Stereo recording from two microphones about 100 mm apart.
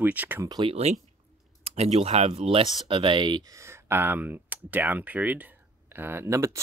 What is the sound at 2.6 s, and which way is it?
Speech, 45° right (ahead or behind).